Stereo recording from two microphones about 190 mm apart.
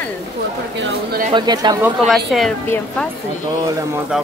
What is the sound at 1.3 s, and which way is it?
Speech, 20° right (ahead or behind).